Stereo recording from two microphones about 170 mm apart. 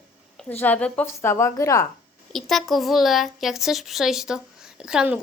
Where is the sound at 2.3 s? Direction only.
Centre (ahead or behind).